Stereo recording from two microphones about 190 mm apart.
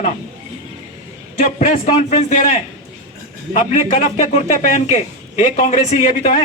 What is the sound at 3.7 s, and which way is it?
Speech, 35° left (ahead or behind).